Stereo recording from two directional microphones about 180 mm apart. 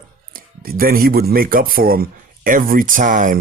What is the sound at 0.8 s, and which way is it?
Speech, 55° right (ahead or behind).